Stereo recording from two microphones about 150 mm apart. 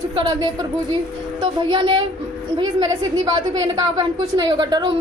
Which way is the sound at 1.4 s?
35° right (ahead or behind).